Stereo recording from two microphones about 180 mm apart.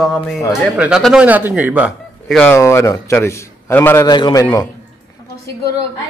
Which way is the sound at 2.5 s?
15° left (ahead or behind).